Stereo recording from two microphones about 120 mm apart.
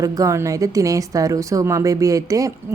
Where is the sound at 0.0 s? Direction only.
30° right (ahead or behind).